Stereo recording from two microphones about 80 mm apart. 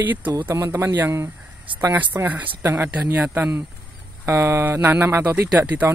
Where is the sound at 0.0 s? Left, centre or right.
Right.